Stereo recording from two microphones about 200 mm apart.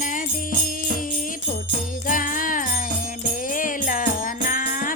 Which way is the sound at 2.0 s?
40° left (ahead or behind).